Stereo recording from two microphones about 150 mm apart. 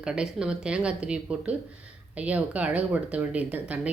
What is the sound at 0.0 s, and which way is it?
Speech, 5° right (ahead or behind).